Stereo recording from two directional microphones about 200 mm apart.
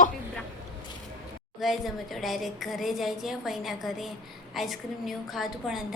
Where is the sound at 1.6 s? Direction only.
Centre (ahead or behind).